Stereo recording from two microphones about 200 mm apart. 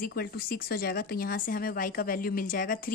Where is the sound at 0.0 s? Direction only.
50° left (ahead or behind).